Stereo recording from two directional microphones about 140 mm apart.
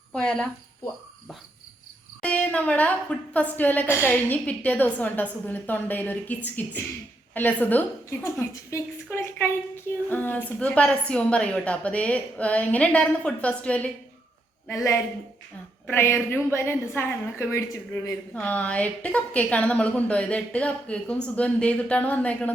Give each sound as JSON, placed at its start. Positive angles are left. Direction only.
{"t": 0.1, "sound": "a woman's voice", "side_deg": 5}
{"t": 2.2, "sound": "a woman's voice", "side_deg": 10}
{"t": 14.7, "sound": "a woman's voice", "side_deg": 20}